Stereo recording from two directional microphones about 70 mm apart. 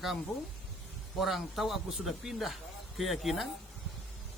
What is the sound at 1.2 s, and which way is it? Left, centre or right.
Speech, centre.